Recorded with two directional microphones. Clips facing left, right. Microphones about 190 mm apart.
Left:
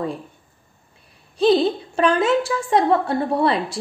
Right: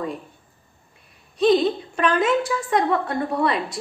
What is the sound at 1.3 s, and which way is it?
A woman's voice, 30° left (ahead or behind).